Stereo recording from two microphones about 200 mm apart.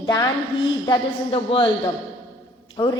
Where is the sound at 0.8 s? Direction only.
25° left (ahead or behind).